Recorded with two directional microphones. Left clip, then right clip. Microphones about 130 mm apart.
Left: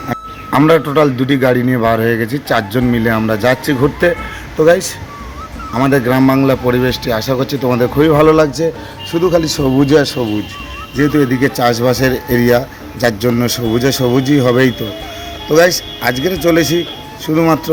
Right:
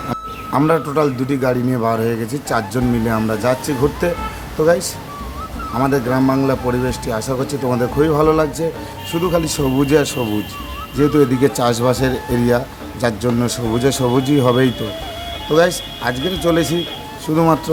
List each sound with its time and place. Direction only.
0.5 s a man's voice: 25° left (ahead or behind)
9.1 s speech: 10° left (ahead or behind)
10.9 s speech: centre (ahead or behind)
15.4 s speech: 15° left (ahead or behind)
17.2 s speech: centre (ahead or behind)